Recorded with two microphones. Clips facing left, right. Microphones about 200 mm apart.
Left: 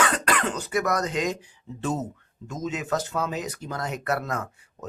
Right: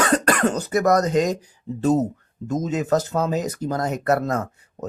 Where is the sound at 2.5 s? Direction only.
40° right (ahead or behind).